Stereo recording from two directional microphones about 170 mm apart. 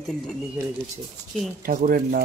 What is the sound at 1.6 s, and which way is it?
Speech, 55° right (ahead or behind).